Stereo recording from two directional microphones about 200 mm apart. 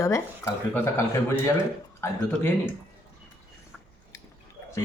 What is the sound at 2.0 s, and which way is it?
Speech, 10° left (ahead or behind).